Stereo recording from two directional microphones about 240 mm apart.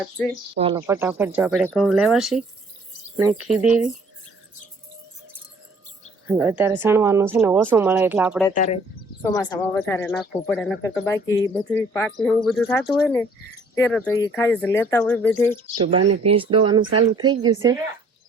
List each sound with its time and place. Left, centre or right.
0.5 s speech: right
0.8 s speech: centre
6.2 s speech: centre
9.3 s speech: centre
15.7 s speech: right
16.2 s speech: right